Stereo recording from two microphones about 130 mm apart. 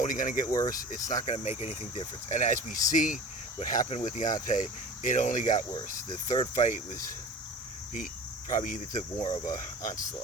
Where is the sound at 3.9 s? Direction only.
65° left (ahead or behind).